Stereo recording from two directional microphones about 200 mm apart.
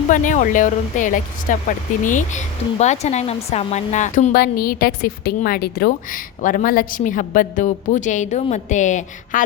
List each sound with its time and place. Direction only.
0.1 s speech: 40° left (ahead or behind)